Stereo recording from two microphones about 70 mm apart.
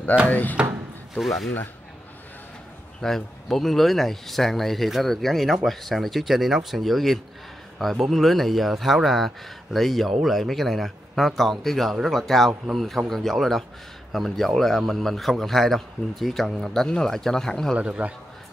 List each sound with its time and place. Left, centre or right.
0.3 s speech: left
1.1 s speech: centre
3.0 s speech: centre
17.7 s a man's voice: centre